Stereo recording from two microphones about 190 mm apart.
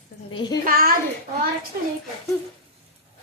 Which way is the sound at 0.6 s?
50° right (ahead or behind).